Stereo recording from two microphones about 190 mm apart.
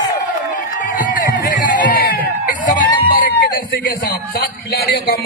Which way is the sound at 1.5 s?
60° left (ahead or behind).